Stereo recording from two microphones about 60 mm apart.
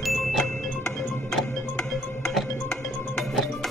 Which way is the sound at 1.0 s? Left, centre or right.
Left.